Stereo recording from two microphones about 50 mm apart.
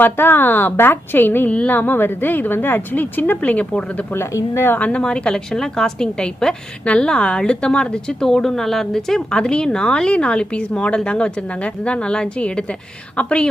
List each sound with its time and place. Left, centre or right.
0.0 s a woman's voice: left
1.5 s a woman's voice: left
1.7 s a woman's voice: left
3.4 s a woman's voice: left
4.3 s a woman's voice: left
4.8 s a woman's voice: left